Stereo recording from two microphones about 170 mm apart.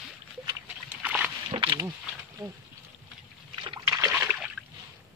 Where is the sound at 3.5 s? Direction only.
30° right (ahead or behind).